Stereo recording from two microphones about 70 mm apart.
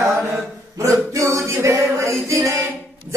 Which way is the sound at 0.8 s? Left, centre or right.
Right.